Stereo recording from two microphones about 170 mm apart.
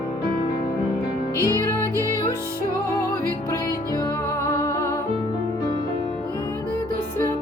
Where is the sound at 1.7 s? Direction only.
15° left (ahead or behind).